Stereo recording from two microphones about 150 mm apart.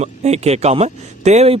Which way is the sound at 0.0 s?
45° right (ahead or behind).